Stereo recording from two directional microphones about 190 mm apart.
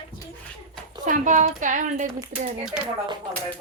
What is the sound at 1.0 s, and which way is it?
Speech, 40° right (ahead or behind).